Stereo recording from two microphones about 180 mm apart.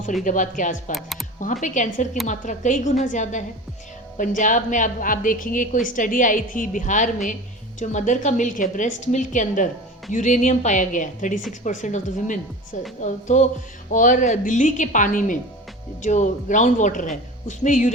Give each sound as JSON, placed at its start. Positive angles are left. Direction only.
{"t": 0.3, "sound": "a woman's voice", "side_deg": 45}
{"t": 0.9, "sound": "speech", "side_deg": 0}
{"t": 1.6, "sound": "a woman's voice", "side_deg": 45}